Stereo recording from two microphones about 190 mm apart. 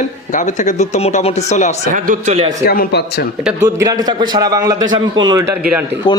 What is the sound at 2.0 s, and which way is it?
Speech, 40° right (ahead or behind).